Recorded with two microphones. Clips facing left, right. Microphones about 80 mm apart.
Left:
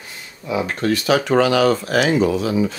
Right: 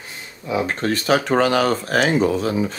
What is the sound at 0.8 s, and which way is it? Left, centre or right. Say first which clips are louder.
Speech: left 3 dB; right.